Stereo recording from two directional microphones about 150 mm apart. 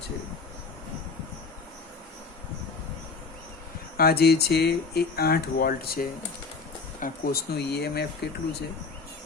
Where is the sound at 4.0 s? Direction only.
90° left.